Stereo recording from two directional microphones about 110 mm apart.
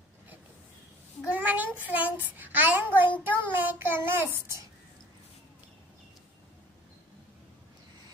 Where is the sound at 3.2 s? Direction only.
15° right (ahead or behind).